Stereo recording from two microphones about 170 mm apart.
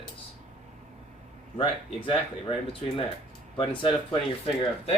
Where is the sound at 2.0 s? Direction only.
35° left (ahead or behind).